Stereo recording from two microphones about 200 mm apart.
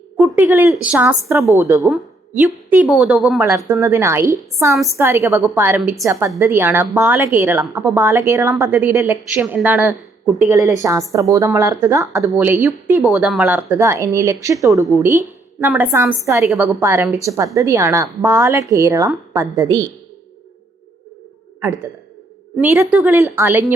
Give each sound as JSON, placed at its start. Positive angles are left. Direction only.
{"t": 0.2, "sound": "a woman's voice", "side_deg": -10}
{"t": 2.6, "sound": "a woman's voice", "side_deg": -5}
{"t": 21.6, "sound": "a woman's voice", "side_deg": -15}